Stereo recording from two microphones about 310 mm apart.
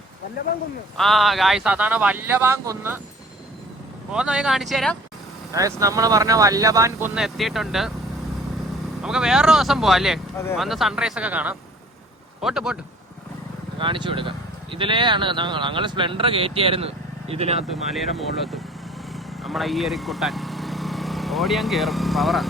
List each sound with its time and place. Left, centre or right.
0.9 s speech: centre
4.1 s speech: centre
5.5 s speech: centre
9.0 s speech: centre
13.7 s speech: centre
17.9 s speech: centre
19.1 s vehicle: centre